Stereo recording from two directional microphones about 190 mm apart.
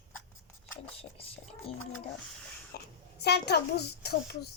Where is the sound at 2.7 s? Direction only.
55° left (ahead or behind).